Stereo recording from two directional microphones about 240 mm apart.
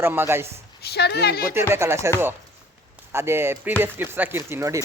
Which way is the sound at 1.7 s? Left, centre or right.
Centre.